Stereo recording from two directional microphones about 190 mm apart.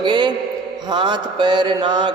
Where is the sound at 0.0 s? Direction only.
25° right (ahead or behind).